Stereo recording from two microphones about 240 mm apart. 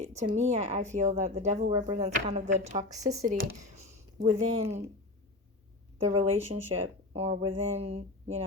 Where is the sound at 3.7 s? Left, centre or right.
Right.